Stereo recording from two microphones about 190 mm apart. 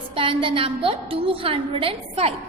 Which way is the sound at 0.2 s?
25° right (ahead or behind).